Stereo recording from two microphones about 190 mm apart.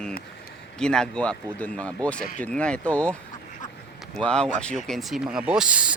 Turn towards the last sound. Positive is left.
turn(degrees=-5)  # may be behind; listen again after turning